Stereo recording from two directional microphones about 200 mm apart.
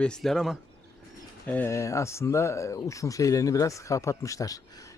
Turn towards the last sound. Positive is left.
turn(degrees=15)  # may be behind; listen again after turning